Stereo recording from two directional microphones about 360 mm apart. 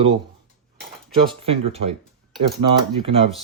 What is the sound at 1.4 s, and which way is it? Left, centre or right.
Speech, centre.